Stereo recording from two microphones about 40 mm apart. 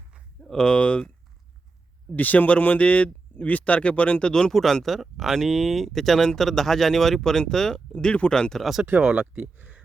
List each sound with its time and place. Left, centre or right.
0.5 s speech: centre
2.1 s speech: left; by 4.5 s centre
4.5 s speech: centre
7.9 s speech: left
8.3 s speech: centre
8.9 s speech: right
9.4 s speech: right